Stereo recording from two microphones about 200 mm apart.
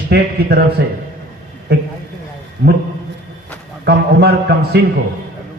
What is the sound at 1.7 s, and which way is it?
Speech, 55° right (ahead or behind).